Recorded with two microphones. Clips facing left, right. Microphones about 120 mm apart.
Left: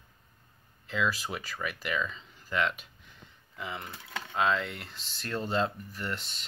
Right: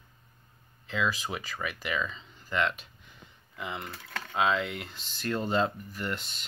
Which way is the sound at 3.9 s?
15° left (ahead or behind).